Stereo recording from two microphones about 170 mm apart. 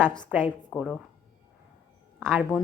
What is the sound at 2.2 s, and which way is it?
Speech, 15° right (ahead or behind).